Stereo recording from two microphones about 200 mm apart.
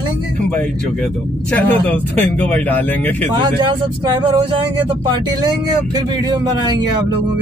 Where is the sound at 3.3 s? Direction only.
25° right (ahead or behind).